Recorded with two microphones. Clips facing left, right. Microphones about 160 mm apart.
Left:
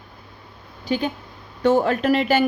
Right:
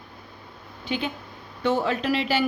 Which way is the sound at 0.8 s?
40° left (ahead or behind).